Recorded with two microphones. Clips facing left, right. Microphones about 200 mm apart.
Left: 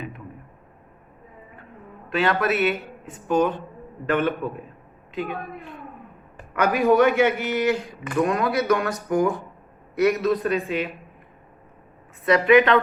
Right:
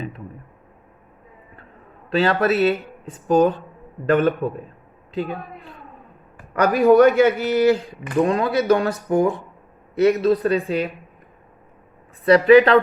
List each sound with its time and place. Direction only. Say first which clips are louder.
2.0 s a man's voice: right 4 dB; 35° right (ahead or behind)
6.5 s a man's voice: right 5 dB; 35° right (ahead or behind)
12.5 s a man's voice: right 4 dB; 35° right (ahead or behind)